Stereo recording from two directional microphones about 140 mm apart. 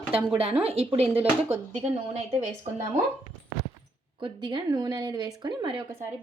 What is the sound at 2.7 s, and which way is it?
Speech, 50° right (ahead or behind).